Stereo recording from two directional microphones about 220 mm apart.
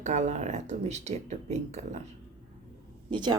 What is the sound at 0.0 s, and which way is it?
Speech, 35° right (ahead or behind).